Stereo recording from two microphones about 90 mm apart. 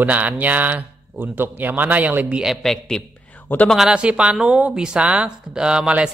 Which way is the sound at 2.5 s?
5° left (ahead or behind).